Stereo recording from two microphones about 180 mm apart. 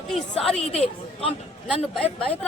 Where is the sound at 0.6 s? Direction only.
35° left (ahead or behind).